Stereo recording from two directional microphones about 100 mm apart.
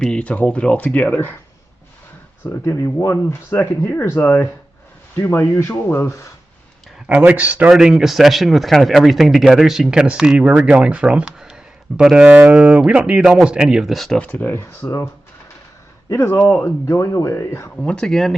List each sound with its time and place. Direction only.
0.0 s speech: 10° left (ahead or behind)
2.4 s speech: 25° left (ahead or behind)
3.5 s speech: 20° left (ahead or behind)
7.1 s speech: 15° right (ahead or behind); by 14.2 s centre (ahead or behind)
14.2 s speech: 15° left (ahead or behind)
17.7 s speech: 10° left (ahead or behind)